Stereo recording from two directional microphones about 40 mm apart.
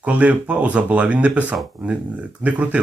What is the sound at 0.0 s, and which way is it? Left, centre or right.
Speech, right.